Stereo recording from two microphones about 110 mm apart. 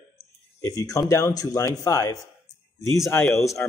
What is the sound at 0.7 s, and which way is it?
Speech, 30° left (ahead or behind).